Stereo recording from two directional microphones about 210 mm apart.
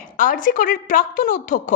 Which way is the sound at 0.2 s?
40° left (ahead or behind).